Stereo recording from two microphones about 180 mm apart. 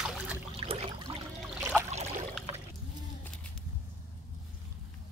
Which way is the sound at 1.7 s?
5° right (ahead or behind).